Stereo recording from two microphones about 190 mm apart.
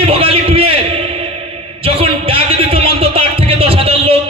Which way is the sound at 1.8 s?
30° right (ahead or behind).